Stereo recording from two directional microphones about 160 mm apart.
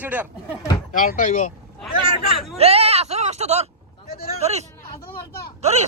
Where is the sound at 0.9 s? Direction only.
55° left (ahead or behind).